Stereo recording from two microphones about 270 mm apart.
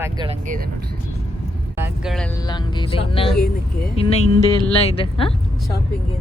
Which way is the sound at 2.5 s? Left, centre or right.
Centre.